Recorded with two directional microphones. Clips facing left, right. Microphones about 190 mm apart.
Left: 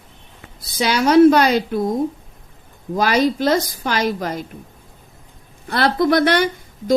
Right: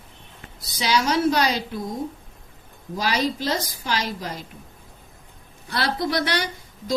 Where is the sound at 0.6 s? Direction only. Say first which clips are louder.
Left 4 dB; 55° left (ahead or behind).